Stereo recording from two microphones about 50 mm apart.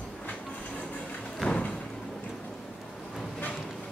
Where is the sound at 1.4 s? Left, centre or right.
Left.